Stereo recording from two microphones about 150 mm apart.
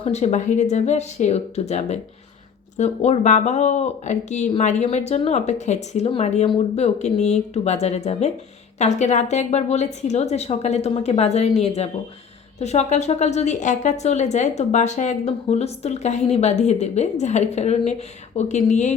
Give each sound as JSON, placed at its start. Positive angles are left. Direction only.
{"t": 0.0, "sound": "a woman's voice", "side_deg": 45}